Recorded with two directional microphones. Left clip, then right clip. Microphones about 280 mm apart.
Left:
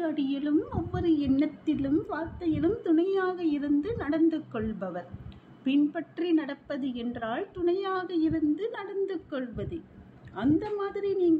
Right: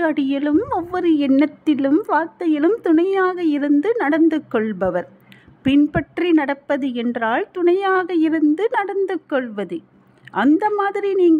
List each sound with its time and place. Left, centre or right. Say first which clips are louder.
0.0 s a woman's voice: right 11 dB; right